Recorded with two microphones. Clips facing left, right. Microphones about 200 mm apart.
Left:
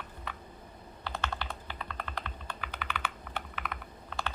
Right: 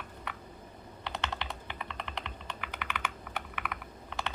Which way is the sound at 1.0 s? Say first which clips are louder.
Even; 20° right (ahead or behind).